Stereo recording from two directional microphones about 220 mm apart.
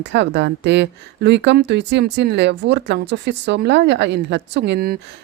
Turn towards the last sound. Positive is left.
turn(degrees=-45)  # may be behind; listen again after turning